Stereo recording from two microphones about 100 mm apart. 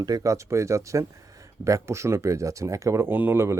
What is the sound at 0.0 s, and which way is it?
Speech, 35° right (ahead or behind).